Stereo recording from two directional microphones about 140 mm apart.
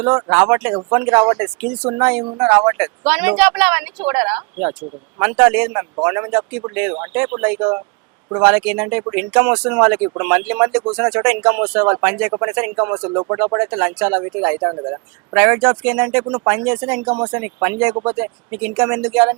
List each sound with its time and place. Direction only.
0.3 s speech: 10° right (ahead or behind)
12.3 s speech: 20° right (ahead or behind)
16.2 s speech: 25° right (ahead or behind)
16.5 s speech: 10° right (ahead or behind)